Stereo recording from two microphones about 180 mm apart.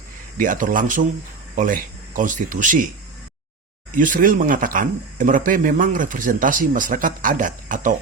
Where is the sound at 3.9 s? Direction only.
45° right (ahead or behind).